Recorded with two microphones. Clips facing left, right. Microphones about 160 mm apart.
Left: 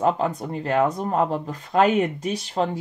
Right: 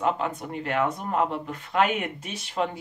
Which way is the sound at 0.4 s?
35° left (ahead or behind).